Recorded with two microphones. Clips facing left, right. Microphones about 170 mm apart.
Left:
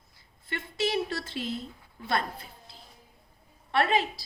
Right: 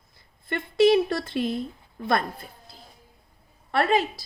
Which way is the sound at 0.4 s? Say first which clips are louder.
Right 12 dB; 55° right (ahead or behind).